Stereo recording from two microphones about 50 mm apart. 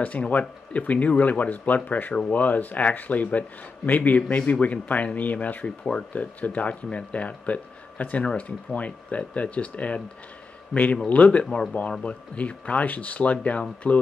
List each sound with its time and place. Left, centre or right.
0.0 s speech: left